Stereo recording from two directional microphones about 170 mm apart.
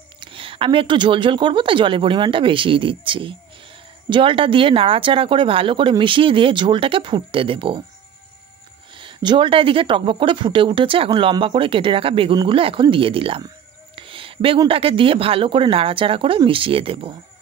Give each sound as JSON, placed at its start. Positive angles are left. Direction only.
{"t": 0.2, "sound": "speech", "side_deg": -30}
{"t": 8.9, "sound": "speech", "side_deg": -30}
{"t": 13.9, "sound": "a sound", "side_deg": -30}
{"t": 14.7, "sound": "speech", "side_deg": -35}